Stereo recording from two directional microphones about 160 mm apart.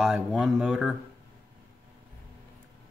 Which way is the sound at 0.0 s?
5° right (ahead or behind).